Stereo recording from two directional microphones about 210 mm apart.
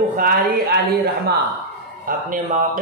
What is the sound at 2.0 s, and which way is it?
Speech, 40° right (ahead or behind).